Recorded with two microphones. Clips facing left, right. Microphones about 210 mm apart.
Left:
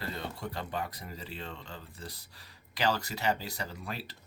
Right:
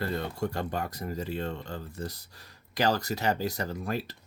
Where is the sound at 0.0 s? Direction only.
50° right (ahead or behind).